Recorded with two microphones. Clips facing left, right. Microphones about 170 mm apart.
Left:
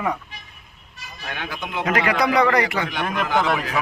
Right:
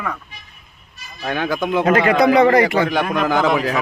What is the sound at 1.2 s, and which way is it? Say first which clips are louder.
A man's voice: right 11 dB; 40° right (ahead or behind).